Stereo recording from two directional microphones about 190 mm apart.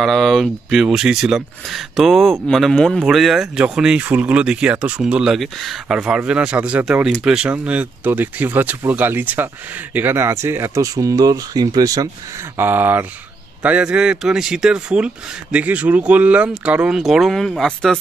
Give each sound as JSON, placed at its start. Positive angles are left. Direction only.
{"t": 0.0, "sound": "speech", "side_deg": 0}